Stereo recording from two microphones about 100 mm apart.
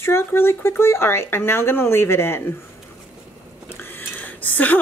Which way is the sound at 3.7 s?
20° left (ahead or behind).